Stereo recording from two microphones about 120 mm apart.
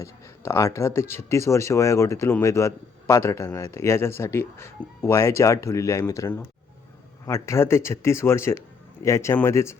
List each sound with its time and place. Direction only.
0.0 s a man's voice: 25° left (ahead or behind)